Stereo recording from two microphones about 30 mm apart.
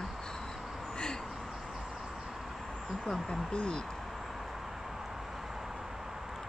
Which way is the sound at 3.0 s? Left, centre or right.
Centre.